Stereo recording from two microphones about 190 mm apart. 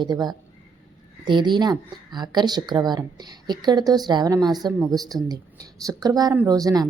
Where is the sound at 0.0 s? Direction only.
20° right (ahead or behind).